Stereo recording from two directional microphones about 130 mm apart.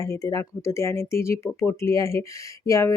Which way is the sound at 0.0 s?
25° left (ahead or behind).